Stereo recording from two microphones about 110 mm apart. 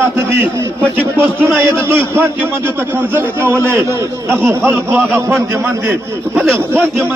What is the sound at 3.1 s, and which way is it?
A man's voice, 20° right (ahead or behind).